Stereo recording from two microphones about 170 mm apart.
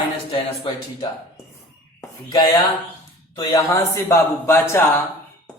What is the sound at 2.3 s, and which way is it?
Mantra, 25° left (ahead or behind).